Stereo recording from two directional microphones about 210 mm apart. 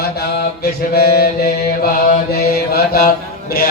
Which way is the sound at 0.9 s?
45° left (ahead or behind).